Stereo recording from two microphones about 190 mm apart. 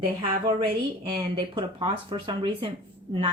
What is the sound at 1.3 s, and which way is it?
Speech, 30° right (ahead or behind).